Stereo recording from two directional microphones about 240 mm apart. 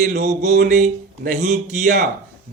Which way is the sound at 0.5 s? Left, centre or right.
Right.